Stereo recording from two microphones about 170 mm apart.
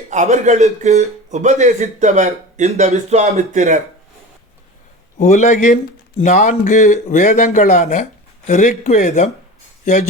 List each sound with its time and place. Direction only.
0.1 s a man's voice: 45° right (ahead or behind)
5.1 s speech: 45° left (ahead or behind)